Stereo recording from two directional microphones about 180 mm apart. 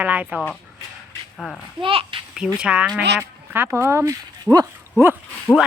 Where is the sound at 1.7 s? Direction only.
30° right (ahead or behind).